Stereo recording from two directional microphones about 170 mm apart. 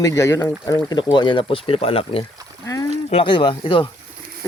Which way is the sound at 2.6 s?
20° left (ahead or behind).